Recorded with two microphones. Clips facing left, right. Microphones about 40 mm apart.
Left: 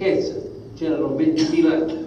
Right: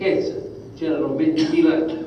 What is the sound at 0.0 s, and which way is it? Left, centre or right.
A man's voice, centre.